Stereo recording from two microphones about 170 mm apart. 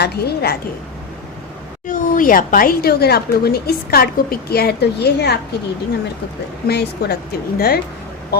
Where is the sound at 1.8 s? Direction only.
55° left (ahead or behind); by 5.3 s 75° left (ahead or behind).